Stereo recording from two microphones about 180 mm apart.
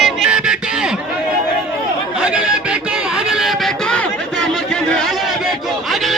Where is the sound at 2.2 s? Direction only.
5° right (ahead or behind).